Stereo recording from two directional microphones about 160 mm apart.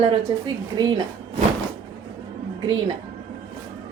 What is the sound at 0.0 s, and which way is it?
Speech, 35° right (ahead or behind).